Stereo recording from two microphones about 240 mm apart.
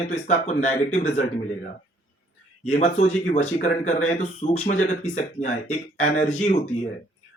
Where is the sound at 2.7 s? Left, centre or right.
Left.